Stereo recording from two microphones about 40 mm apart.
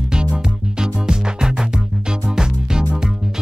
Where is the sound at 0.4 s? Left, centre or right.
Centre.